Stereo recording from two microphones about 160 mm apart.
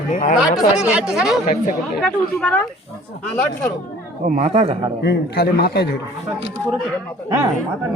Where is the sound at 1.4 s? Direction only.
50° left (ahead or behind).